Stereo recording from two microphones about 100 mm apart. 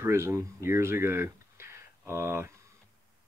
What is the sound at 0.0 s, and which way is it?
Speech, 25° right (ahead or behind).